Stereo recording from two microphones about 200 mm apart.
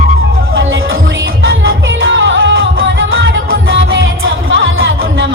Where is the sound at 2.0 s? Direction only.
70° right (ahead or behind).